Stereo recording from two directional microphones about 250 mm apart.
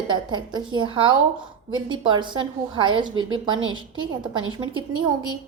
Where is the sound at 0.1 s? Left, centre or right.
Centre.